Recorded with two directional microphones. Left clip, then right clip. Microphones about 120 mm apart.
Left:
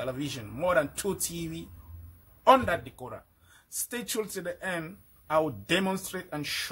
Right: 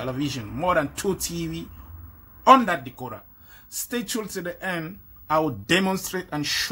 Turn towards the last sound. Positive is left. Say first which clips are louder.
# right 7 dB
turn(degrees=5)  # may be behind; listen again after turning